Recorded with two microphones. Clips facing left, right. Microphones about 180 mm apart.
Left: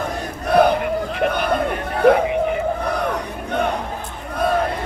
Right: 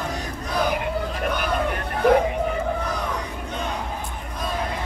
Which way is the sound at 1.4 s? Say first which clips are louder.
Left 4 dB; 60° left (ahead or behind).